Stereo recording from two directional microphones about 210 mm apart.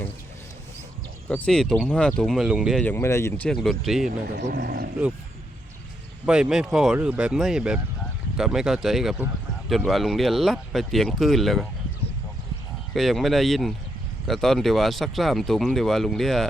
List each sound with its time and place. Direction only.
1.3 s speech: 5° left (ahead or behind)
2.8 s speech: 10° left (ahead or behind)
4.4 s speech: 50° right (ahead or behind)
6.2 s speech: 5° right (ahead or behind)
12.9 s speech: centre (ahead or behind)